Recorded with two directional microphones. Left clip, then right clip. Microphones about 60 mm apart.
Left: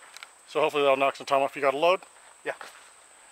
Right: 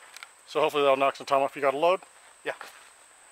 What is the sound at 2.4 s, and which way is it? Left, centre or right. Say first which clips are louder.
Speech: even; right.